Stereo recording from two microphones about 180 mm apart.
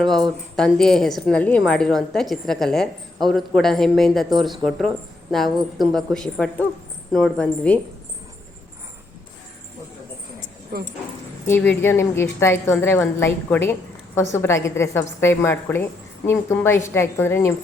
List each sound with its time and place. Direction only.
0.0 s a woman's voice: centre (ahead or behind)
10.7 s speech: 60° right (ahead or behind)
11.4 s a woman's voice: 10° left (ahead or behind)